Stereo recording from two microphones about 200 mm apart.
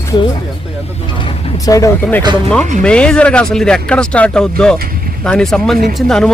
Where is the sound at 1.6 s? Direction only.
15° left (ahead or behind).